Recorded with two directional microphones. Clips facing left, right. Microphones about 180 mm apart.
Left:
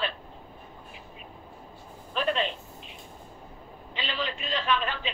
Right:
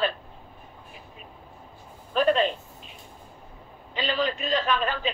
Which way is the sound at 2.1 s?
45° right (ahead or behind).